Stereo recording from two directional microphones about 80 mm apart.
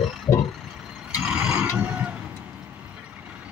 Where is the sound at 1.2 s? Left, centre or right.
Centre.